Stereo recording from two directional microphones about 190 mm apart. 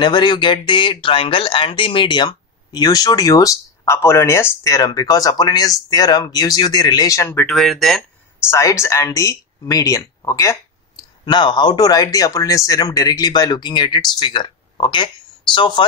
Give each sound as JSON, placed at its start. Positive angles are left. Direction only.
{"t": 0.0, "sound": "speech", "side_deg": 25}
{"t": 7.4, "sound": "speech", "side_deg": 0}
{"t": 8.5, "sound": "speech", "side_deg": 15}